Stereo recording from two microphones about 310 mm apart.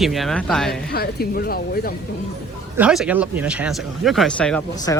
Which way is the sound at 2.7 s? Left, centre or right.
Centre.